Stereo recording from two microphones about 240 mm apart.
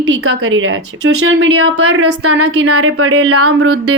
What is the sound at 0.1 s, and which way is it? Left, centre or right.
A woman's voice, right.